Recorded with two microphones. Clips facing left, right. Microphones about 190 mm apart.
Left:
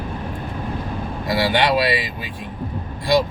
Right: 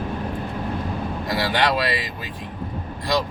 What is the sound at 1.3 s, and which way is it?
Speech, 10° left (ahead or behind).